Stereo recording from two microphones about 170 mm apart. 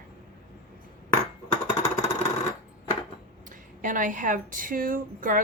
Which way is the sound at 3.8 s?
50° right (ahead or behind).